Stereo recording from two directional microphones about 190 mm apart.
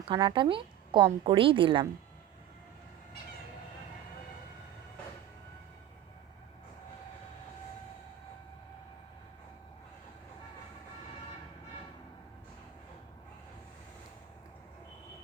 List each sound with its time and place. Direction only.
0.1 s a woman's voice: 25° right (ahead or behind)